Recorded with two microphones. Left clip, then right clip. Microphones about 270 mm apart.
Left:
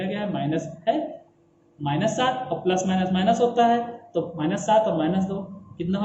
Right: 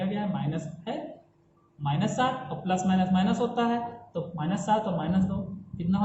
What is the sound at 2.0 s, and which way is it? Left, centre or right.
A man's voice, centre.